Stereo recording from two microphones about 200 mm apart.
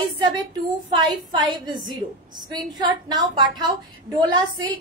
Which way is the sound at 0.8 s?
20° right (ahead or behind).